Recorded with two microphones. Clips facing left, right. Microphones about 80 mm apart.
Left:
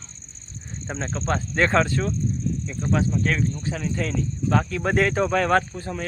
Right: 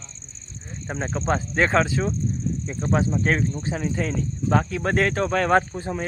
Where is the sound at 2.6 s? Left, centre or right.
Right; by 5.5 s centre.